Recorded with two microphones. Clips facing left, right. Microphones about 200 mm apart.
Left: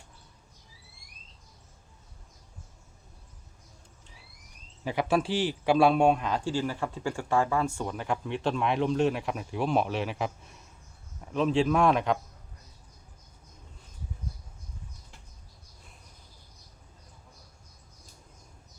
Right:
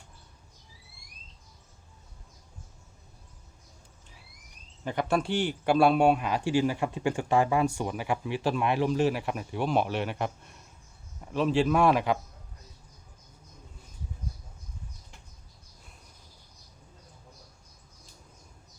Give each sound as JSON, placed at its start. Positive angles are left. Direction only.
{"t": 4.8, "sound": "a man's voice", "side_deg": 5}